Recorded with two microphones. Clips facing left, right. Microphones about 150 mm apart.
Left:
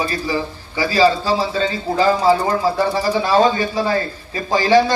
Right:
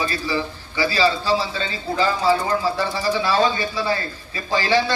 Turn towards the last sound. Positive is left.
turn(degrees=40)  # may be behind; listen again after turning